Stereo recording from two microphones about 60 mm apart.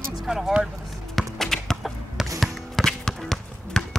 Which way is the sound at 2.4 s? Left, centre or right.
Centre.